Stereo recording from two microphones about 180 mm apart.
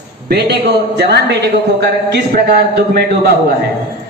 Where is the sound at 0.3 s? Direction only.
65° right (ahead or behind).